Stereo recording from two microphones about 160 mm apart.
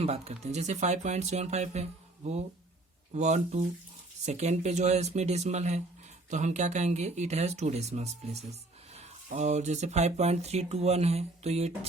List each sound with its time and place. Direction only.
0.0 s speech: 40° right (ahead or behind)